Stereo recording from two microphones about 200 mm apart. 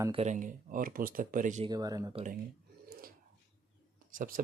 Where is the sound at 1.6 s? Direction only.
20° right (ahead or behind).